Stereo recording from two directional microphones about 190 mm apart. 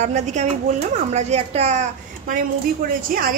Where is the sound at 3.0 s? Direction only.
45° right (ahead or behind).